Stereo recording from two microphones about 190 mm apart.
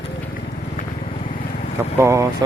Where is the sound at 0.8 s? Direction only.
40° left (ahead or behind).